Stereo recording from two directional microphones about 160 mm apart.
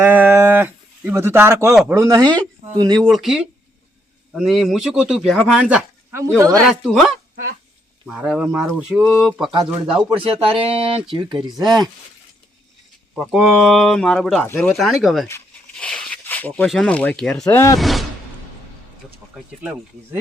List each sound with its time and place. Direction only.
0.0 s livestock: 15° right (ahead or behind)
1.9 s speech: 20° right (ahead or behind)
3.0 s speech: centre (ahead or behind)
10.1 s speech: 35° right (ahead or behind)
13.3 s speech: 5° right (ahead or behind)
14.4 s speech: 15° left (ahead or behind)
14.7 s speech: centre (ahead or behind)
17.4 s speech: 20° left (ahead or behind)
17.7 s speech: centre (ahead or behind)